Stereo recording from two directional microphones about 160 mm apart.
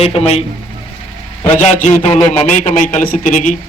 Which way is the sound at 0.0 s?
40° left (ahead or behind).